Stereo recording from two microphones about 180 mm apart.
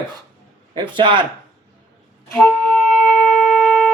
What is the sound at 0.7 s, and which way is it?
Speech, 25° right (ahead or behind).